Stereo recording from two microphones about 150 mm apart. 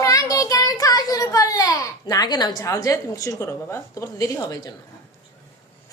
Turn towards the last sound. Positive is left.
turn(degrees=25)  # may be behind; listen again after turning